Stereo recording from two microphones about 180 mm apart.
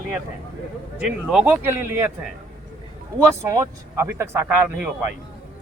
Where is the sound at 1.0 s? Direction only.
5° right (ahead or behind).